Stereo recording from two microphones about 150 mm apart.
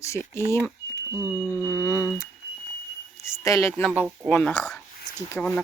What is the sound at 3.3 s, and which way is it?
Speech, 20° left (ahead or behind).